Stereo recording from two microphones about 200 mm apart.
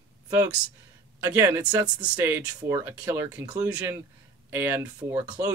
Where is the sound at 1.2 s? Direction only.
10° right (ahead or behind).